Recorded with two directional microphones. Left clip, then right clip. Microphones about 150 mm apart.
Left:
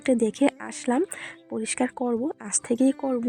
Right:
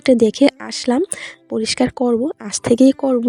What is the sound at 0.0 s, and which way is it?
Speech, 40° right (ahead or behind).